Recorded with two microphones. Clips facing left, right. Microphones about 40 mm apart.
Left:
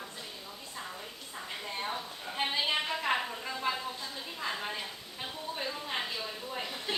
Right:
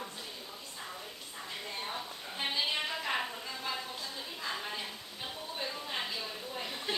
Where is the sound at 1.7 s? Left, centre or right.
Centre.